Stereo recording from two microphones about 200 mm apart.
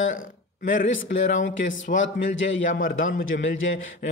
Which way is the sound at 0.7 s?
70° left (ahead or behind).